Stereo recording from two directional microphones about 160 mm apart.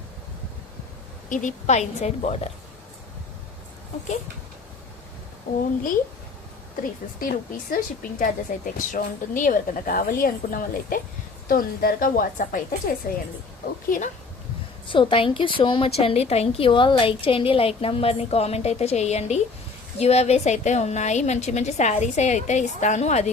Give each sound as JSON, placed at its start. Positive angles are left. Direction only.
{"t": 1.3, "sound": "a woman's voice", "side_deg": 50}
{"t": 7.2, "sound": "a woman's voice", "side_deg": 60}
{"t": 13.0, "sound": "a woman's voice", "side_deg": 65}
{"t": 13.9, "sound": "a woman's voice", "side_deg": 55}
{"t": 14.8, "sound": "a woman's voice", "side_deg": 35}